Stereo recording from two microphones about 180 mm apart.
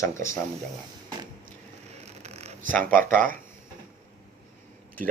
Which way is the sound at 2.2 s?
35° right (ahead or behind).